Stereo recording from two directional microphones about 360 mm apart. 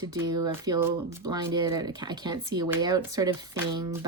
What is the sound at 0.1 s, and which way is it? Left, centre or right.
Speech, centre.